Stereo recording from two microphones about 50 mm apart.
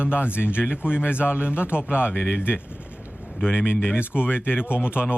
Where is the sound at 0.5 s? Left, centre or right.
Right.